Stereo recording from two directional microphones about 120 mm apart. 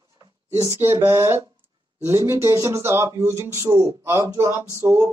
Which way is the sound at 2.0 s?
25° right (ahead or behind).